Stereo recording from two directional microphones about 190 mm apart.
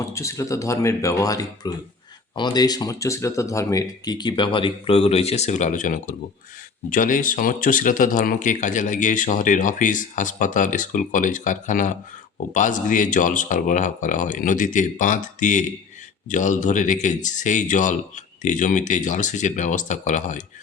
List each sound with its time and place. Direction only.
0.0 s speech: 15° left (ahead or behind); by 20.4 s 40° left (ahead or behind)